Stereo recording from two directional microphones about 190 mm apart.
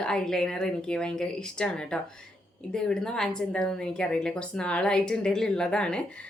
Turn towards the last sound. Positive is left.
turn(degrees=5)  # may be behind; listen again after turning